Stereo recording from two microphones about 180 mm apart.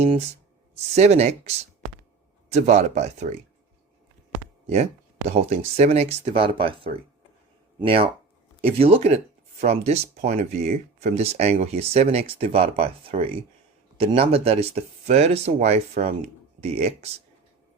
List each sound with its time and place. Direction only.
0.9 s speech: 40° right (ahead or behind)
4.6 s speech: 35° right (ahead or behind)